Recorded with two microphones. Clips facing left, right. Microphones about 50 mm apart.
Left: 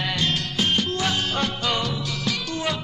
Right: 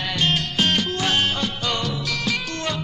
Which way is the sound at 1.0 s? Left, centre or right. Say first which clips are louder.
Right 4 dB; right.